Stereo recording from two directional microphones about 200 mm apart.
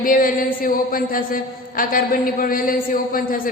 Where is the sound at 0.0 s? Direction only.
45° left (ahead or behind).